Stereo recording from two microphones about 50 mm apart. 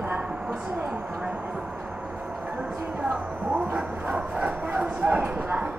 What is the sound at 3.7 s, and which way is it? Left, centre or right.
Bow-wow, right.